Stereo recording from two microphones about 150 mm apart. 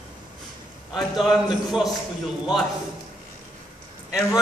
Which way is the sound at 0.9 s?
Centre (ahead or behind).